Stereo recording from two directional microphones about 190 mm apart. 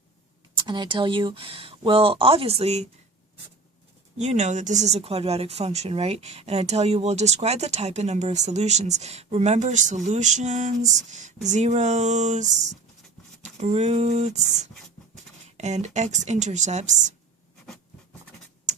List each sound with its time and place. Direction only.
0.7 s speech: 25° right (ahead or behind)
4.2 s speech: 35° right (ahead or behind)
13.6 s speech: 35° right (ahead or behind)